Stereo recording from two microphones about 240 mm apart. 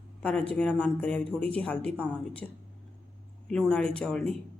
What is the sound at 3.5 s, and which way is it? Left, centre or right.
Speech, centre.